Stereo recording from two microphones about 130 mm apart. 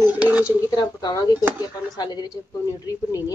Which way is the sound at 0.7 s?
35° left (ahead or behind).